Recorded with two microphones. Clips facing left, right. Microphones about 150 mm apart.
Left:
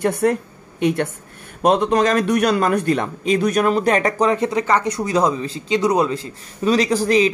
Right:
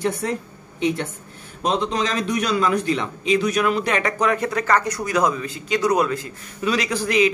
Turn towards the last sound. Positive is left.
turn(degrees=35)  # may be behind; listen again after turning